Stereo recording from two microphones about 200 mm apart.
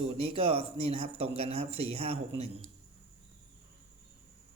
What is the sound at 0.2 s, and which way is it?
Speech, 30° right (ahead or behind).